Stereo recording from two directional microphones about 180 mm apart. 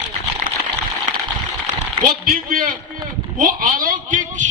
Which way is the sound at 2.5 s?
50° right (ahead or behind).